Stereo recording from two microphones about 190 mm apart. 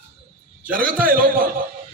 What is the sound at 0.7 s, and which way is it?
Speech, 45° right (ahead or behind).